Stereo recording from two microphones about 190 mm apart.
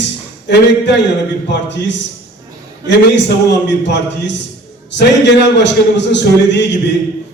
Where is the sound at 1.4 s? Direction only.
65° left (ahead or behind).